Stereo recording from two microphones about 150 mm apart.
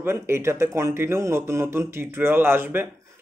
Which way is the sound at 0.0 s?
15° right (ahead or behind).